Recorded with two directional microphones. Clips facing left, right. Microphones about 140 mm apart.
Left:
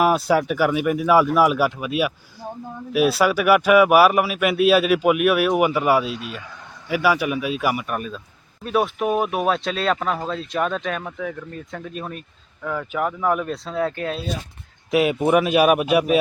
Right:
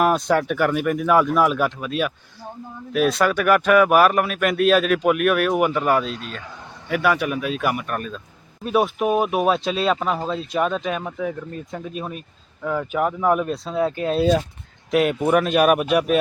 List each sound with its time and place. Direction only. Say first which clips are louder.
0.0 s speech: left 1 dB; 5° left (ahead or behind)
8.6 s speech: right 1 dB; 15° right (ahead or behind)
14.8 s speech: even; 5° left (ahead or behind)